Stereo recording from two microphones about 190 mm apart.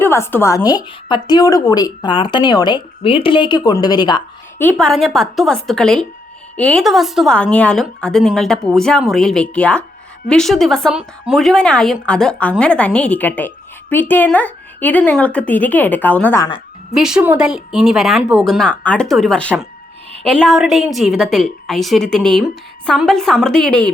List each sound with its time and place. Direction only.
0.0 s speech: 10° left (ahead or behind)
4.8 s speech: centre (ahead or behind)
16.9 s speech: 5° right (ahead or behind)